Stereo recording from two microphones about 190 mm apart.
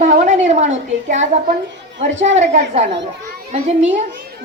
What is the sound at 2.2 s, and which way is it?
A woman's voice, 35° right (ahead or behind).